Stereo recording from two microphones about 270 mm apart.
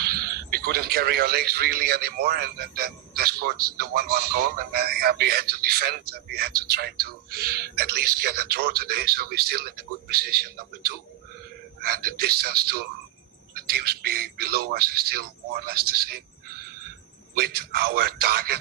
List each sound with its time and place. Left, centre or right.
0.0 s a man's voice: right
17.3 s speech: right